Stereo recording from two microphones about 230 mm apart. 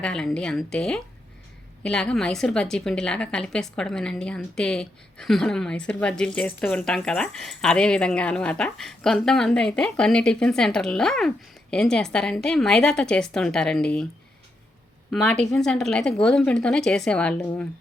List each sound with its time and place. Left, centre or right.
0.0 s a woman's voice: centre
15.1 s a woman's voice: centre